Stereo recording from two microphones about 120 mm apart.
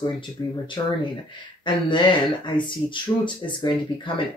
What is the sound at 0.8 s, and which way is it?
Speech, 40° left (ahead or behind).